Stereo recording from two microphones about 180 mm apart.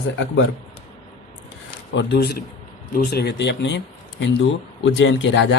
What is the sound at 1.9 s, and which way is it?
Speech, 75° left (ahead or behind).